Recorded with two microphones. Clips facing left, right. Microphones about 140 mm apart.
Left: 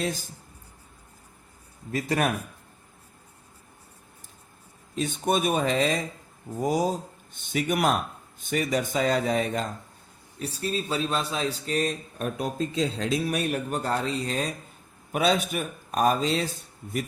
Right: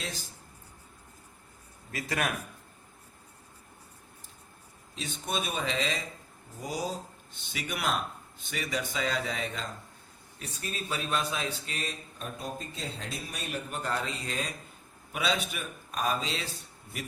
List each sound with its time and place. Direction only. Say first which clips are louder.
0.0 s speech: left 10 dB; 50° left (ahead or behind)
1.9 s a man's voice: left 7 dB; 35° left (ahead or behind)
4.9 s speech: left 9 dB; 50° left (ahead or behind)
10.4 s a man's voice: left 9 dB; 35° left (ahead or behind)
12.2 s a man's voice: left 10 dB; 90° left; by 13.6 s 60° left (ahead or behind)
13.7 s a man's voice: left 6 dB; 40° left (ahead or behind)